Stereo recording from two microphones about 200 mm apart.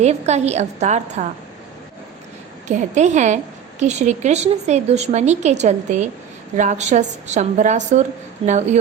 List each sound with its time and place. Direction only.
0.0 s speech: 35° right (ahead or behind)
2.6 s speech: 35° right (ahead or behind)